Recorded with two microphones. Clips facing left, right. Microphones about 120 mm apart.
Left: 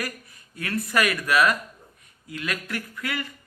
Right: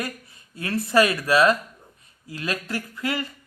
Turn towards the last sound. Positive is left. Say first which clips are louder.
# right 3 dB
turn(degrees=-30)  # may be behind; listen again after turning